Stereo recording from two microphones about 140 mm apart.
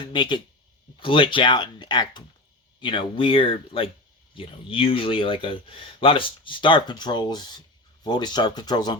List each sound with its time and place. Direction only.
0.0 s speech: 35° left (ahead or behind)